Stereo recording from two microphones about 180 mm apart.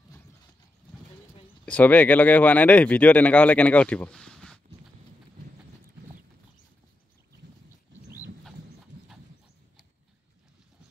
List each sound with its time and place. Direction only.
1.7 s speech: 10° left (ahead or behind)